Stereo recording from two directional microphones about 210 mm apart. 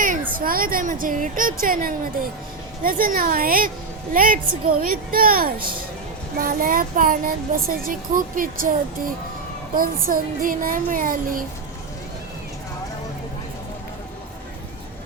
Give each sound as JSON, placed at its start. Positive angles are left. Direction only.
{"t": 0.3, "sound": "speech", "side_deg": -45}